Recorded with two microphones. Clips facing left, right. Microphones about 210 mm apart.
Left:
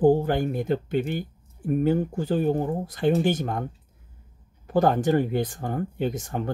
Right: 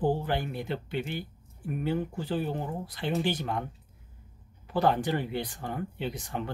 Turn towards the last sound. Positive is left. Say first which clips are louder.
# left 6 dB
turn(degrees=45)  # may be behind; listen again after turning